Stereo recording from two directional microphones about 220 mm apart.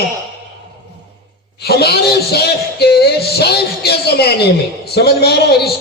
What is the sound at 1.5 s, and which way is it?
A man's voice, 45° left (ahead or behind).